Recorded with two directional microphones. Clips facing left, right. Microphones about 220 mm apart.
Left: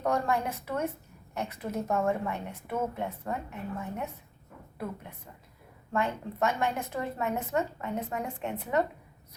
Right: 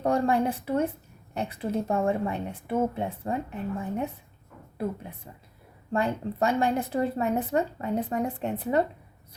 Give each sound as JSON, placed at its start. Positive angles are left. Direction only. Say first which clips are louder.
{"t": 0.0, "sound": "a woman's voice", "louder": "right 5 dB", "side_deg": -30}
{"t": 5.9, "sound": "a woman's voice", "louder": "right 4 dB", "side_deg": -35}